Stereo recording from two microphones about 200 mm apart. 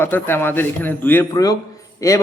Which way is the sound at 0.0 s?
10° left (ahead or behind).